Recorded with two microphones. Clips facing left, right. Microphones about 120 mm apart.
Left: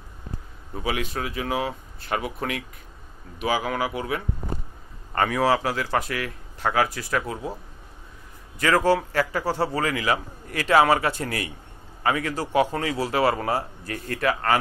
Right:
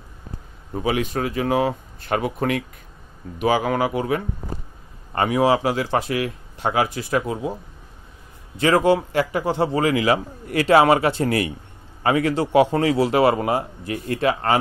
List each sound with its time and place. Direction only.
0.7 s speech: 35° right (ahead or behind)
3.5 s speech: 40° right (ahead or behind)
5.1 s a man's voice: 20° right (ahead or behind)
8.5 s a man's voice: 25° right (ahead or behind)